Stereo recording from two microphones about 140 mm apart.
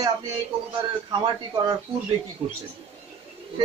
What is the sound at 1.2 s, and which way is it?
Speech, 30° right (ahead or behind).